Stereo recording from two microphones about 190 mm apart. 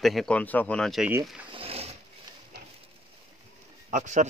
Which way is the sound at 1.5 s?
30° right (ahead or behind).